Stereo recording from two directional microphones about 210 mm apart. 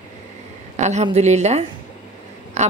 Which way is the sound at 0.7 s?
35° right (ahead or behind).